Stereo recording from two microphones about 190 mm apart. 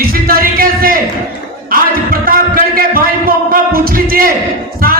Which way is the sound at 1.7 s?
50° right (ahead or behind).